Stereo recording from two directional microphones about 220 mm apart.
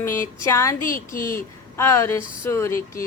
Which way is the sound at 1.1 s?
40° left (ahead or behind).